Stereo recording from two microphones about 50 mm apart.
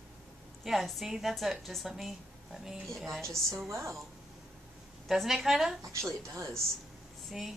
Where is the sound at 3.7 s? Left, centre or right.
Right.